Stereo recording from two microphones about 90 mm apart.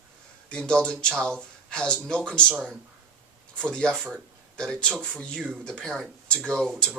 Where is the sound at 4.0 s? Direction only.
10° right (ahead or behind).